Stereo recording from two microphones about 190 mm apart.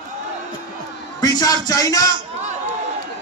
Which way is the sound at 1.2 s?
20° left (ahead or behind).